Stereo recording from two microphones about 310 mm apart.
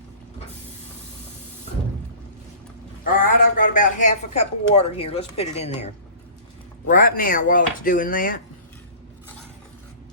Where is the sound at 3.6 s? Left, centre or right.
Left.